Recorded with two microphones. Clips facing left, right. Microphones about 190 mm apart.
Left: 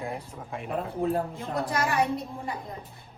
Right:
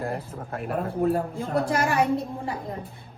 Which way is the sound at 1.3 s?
30° right (ahead or behind).